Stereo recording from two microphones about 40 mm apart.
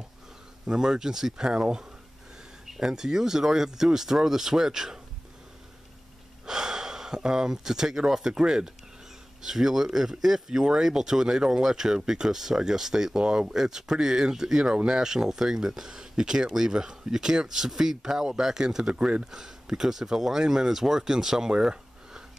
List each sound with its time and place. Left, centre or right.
0.7 s speech: centre
6.4 s speech: centre